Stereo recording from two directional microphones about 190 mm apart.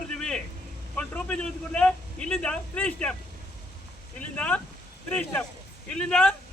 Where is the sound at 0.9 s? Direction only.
5° left (ahead or behind).